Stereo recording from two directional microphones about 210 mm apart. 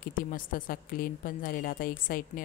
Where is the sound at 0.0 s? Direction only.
40° left (ahead or behind).